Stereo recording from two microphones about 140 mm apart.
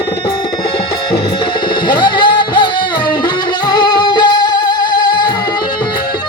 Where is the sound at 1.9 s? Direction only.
35° left (ahead or behind).